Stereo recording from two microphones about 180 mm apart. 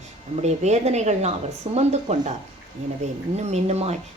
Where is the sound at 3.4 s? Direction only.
35° right (ahead or behind).